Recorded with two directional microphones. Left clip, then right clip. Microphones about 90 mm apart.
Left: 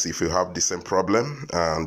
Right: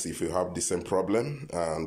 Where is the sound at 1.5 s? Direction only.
10° right (ahead or behind).